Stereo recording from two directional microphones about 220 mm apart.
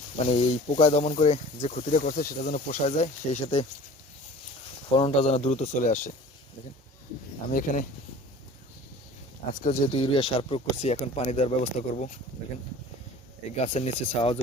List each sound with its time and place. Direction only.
0.2 s speech: 25° left (ahead or behind)
4.9 s speech: 25° left (ahead or behind)
7.5 s speech: 35° left (ahead or behind)
9.6 s speech: 30° left (ahead or behind)
13.6 s speech: 30° left (ahead or behind)